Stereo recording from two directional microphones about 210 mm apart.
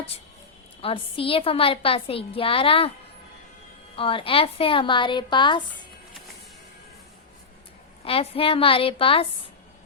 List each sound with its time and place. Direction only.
0.8 s a woman's voice: 25° left (ahead or behind)
3.9 s a woman's voice: 25° left (ahead or behind)
8.0 s a woman's voice: 25° left (ahead or behind)